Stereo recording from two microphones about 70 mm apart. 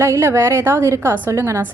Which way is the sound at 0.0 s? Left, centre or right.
Right.